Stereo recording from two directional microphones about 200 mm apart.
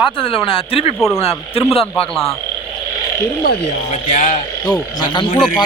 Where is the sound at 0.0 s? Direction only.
25° left (ahead or behind).